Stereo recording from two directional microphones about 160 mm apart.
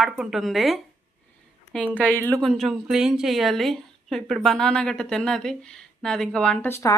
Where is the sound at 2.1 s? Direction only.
10° left (ahead or behind).